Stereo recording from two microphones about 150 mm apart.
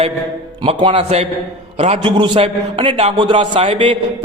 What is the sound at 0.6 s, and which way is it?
A man's voice, 40° right (ahead or behind).